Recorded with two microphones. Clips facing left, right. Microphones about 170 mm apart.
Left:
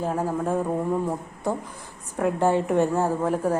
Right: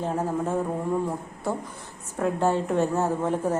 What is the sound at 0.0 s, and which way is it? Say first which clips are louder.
Speech: left 1 dB; 5° left (ahead or behind).